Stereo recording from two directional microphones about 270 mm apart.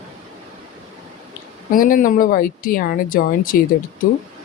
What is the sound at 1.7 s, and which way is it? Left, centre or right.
Speech, left.